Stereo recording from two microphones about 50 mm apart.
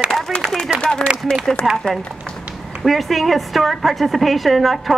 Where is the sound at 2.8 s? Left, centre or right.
Centre.